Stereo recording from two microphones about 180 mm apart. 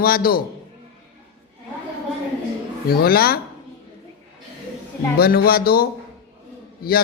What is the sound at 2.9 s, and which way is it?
Speech, 55° left (ahead or behind).